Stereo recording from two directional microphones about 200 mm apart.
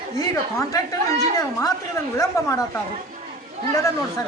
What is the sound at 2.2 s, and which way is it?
Speech, 15° left (ahead or behind).